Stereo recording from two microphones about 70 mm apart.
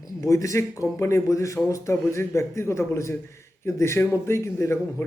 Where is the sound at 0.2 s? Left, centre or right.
Left.